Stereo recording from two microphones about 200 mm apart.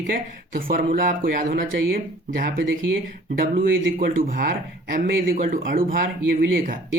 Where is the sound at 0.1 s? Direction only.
45° right (ahead or behind).